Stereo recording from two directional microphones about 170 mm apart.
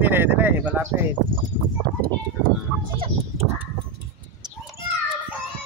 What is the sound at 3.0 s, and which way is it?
Speech, 35° right (ahead or behind).